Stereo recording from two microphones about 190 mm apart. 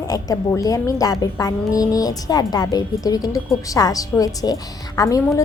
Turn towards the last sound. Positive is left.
turn(degrees=15)  # may be behind; listen again after turning